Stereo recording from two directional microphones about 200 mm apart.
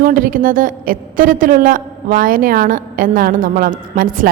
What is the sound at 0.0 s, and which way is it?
A woman's voice, 45° right (ahead or behind).